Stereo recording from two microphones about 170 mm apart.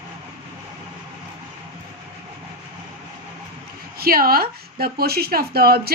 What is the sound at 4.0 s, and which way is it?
Speech, 60° right (ahead or behind).